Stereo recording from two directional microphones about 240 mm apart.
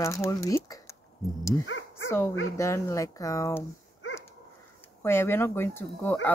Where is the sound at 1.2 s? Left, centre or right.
Centre.